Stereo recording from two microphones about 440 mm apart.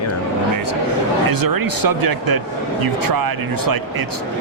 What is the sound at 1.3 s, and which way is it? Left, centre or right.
Speech, right.